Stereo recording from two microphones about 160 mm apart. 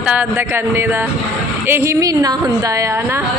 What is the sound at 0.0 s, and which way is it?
A woman's voice, 10° right (ahead or behind).